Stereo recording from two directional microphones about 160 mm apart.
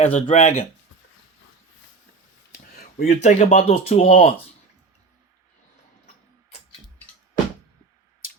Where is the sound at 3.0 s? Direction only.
45° left (ahead or behind).